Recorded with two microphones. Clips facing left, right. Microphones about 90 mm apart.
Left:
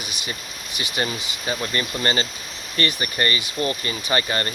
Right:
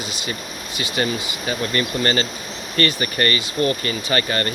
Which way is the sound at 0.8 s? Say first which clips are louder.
Right 3 dB; 20° left (ahead or behind).